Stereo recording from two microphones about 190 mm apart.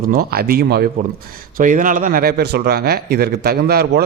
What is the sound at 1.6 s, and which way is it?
Speech, 45° right (ahead or behind).